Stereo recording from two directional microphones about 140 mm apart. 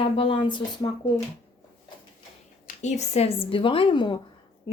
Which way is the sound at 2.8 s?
50° left (ahead or behind).